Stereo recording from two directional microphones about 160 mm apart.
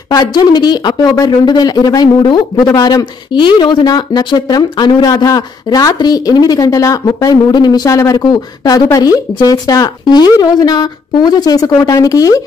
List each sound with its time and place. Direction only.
0.1 s speech: 25° left (ahead or behind)